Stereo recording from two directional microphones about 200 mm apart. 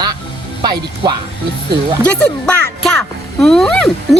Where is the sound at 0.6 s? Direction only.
20° right (ahead or behind).